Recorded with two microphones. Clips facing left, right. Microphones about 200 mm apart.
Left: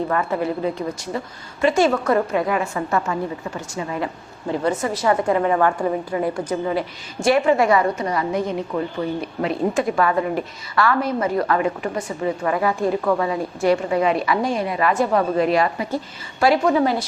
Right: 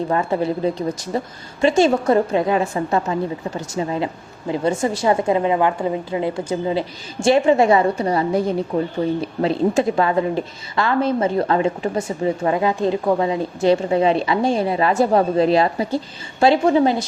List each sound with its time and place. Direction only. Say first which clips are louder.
0.1 s a woman's voice: right 2 dB; 30° right (ahead or behind)
1.6 s a woman's voice: right 2 dB; 25° right (ahead or behind)